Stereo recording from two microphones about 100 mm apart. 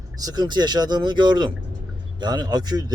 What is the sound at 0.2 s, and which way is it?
Speech, 40° right (ahead or behind).